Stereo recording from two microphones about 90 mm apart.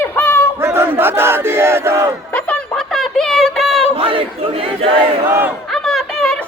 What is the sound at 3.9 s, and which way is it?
Speech, 90° right.